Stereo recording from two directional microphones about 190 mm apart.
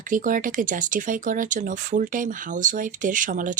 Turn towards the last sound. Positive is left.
turn(degrees=-45)  # may be behind; listen again after turning